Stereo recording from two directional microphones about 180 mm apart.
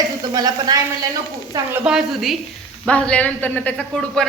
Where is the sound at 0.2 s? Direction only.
20° right (ahead or behind).